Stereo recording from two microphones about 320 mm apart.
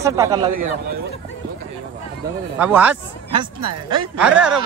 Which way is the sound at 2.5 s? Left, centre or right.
Centre.